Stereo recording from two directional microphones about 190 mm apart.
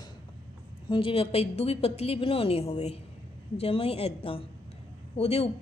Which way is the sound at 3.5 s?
30° left (ahead or behind).